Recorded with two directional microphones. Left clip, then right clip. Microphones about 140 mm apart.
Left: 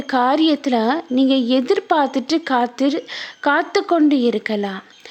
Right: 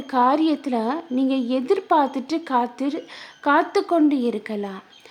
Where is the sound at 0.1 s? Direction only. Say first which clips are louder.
Left 3 dB; 20° left (ahead or behind).